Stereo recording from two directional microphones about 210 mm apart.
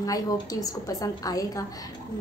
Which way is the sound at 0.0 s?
15° left (ahead or behind).